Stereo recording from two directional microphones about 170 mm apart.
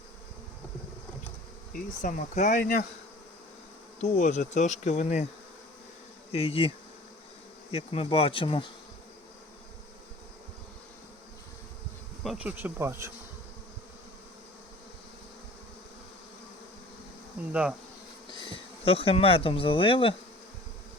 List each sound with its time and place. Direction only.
1.7 s bee: 50° left (ahead or behind)
4.0 s bee: 45° left (ahead or behind)
6.3 s speech: 35° left (ahead or behind)
7.7 s speech: 35° left (ahead or behind)
12.2 s insect: 5° right (ahead or behind)
17.5 s insect: 5° right (ahead or behind)
18.3 s speech: 30° left (ahead or behind)